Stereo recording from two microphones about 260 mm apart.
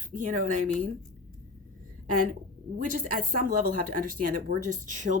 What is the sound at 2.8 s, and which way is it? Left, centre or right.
Speech, right.